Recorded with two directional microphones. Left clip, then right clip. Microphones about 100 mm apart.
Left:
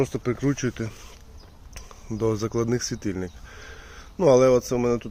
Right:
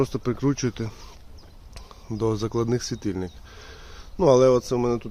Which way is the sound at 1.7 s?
20° right (ahead or behind).